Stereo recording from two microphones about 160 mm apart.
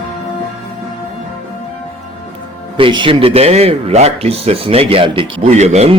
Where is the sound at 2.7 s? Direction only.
30° right (ahead or behind).